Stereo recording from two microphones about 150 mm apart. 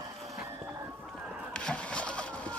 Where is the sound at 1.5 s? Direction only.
5° left (ahead or behind).